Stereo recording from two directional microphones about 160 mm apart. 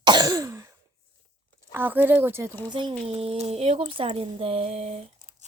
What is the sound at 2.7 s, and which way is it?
Speech, 30° right (ahead or behind).